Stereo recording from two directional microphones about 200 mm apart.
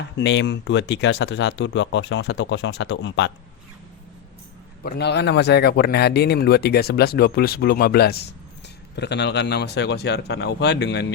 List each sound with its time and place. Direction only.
0.2 s speech: 60° left (ahead or behind)
4.8 s speech: 55° left (ahead or behind)